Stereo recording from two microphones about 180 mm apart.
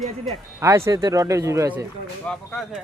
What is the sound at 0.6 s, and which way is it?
Speech, 15° right (ahead or behind).